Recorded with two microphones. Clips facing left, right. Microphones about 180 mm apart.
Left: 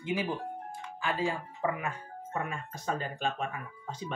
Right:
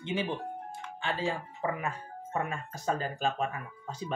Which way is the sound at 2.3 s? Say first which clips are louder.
Right 2 dB; 35° right (ahead or behind).